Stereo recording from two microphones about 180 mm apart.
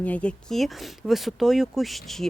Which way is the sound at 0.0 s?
5° left (ahead or behind).